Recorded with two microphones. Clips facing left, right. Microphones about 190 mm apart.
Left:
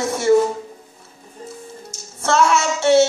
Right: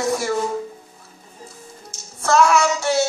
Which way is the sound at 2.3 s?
25° left (ahead or behind).